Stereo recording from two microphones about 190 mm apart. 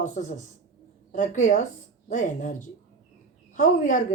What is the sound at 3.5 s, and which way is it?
Speech, 45° left (ahead or behind).